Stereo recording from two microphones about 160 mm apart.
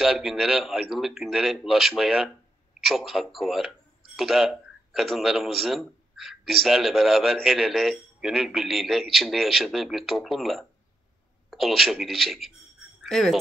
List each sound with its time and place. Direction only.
0.0 s speech: 5° right (ahead or behind)